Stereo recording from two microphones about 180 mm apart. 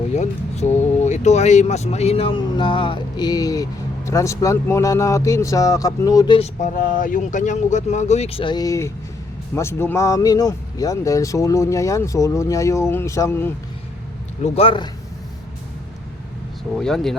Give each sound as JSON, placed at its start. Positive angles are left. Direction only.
{"t": 0.1, "sound": "speech", "side_deg": 40}
{"t": 6.6, "sound": "speech", "side_deg": 45}
{"t": 14.4, "sound": "speech", "side_deg": 35}
{"t": 16.7, "sound": "speech", "side_deg": 0}